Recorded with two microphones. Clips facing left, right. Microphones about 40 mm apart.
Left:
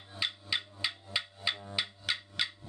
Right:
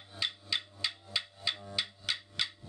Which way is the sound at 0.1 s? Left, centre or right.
Centre.